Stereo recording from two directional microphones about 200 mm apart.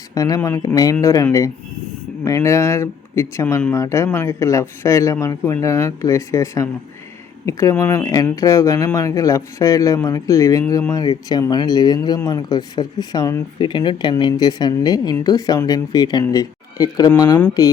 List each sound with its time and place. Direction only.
0.1 s speech: 15° left (ahead or behind)